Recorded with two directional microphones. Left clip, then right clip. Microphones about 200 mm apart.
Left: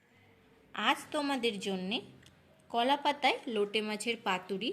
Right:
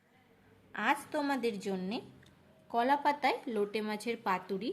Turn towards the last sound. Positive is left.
turn(degrees=0)  # may be behind; listen again after turning